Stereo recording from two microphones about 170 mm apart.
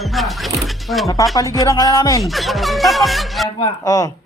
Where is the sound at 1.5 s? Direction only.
20° left (ahead or behind).